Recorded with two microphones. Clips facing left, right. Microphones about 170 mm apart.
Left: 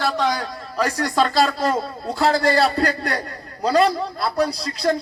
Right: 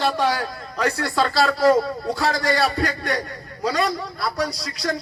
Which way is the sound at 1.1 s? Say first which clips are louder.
Left 3 dB; 20° left (ahead or behind).